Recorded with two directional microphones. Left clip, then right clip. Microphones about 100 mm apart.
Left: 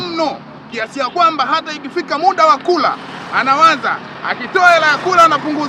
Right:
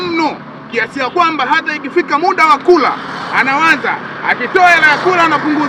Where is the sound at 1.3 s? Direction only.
20° left (ahead or behind).